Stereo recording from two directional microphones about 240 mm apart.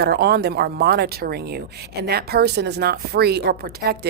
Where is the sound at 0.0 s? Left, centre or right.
Right.